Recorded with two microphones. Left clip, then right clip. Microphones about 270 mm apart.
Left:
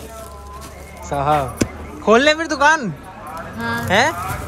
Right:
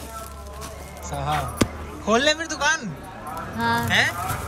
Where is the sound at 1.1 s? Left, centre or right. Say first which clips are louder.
Left 8 dB; centre.